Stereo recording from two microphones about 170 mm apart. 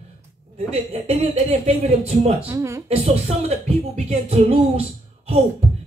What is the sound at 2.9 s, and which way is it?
Speech, 40° right (ahead or behind).